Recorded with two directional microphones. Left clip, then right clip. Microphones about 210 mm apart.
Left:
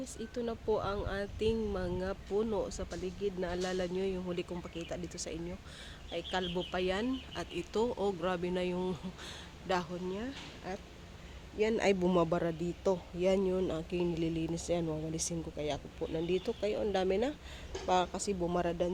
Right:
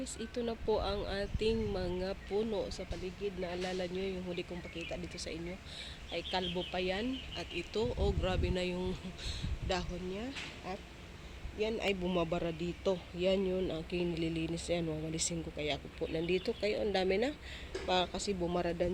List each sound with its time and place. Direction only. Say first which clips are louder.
0.0 s speech: even; 5° left (ahead or behind); by 10.2 s 20° left (ahead or behind)
11.8 s speech: left 6 dB; 35° left (ahead or behind)
12.9 s speech: left 2 dB; 15° left (ahead or behind)